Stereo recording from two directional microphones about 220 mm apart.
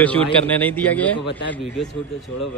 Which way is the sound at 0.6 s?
5° left (ahead or behind).